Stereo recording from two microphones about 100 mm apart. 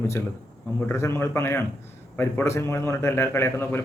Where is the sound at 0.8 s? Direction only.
25° left (ahead or behind).